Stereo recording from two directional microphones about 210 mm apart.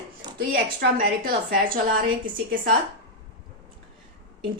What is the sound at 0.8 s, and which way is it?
Speech, 45° right (ahead or behind).